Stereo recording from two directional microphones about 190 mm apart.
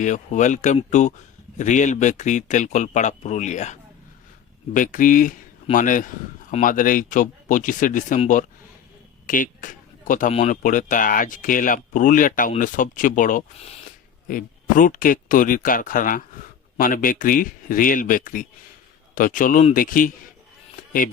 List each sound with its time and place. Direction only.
0.0 s speech: 40° left (ahead or behind)